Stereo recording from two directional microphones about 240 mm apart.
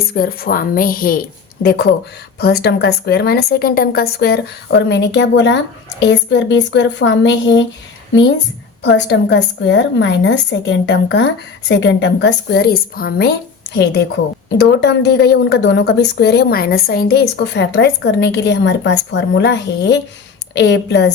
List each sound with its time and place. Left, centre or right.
0.1 s a woman's voice: left